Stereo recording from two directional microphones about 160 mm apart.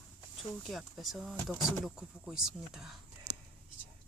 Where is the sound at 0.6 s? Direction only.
Centre (ahead or behind).